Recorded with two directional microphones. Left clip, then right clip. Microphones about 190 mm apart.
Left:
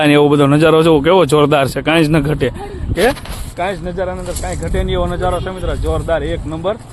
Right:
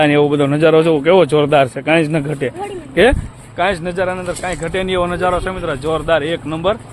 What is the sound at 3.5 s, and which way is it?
Speech, 10° right (ahead or behind).